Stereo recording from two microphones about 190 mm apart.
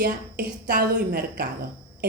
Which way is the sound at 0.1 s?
50° right (ahead or behind).